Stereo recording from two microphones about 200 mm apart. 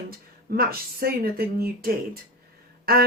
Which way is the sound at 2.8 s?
50° right (ahead or behind).